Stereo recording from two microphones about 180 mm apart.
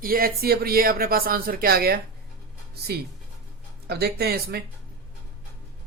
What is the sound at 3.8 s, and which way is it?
Speech, 60° right (ahead or behind).